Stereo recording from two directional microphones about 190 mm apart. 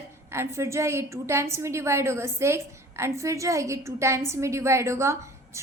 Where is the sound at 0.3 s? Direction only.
15° right (ahead or behind).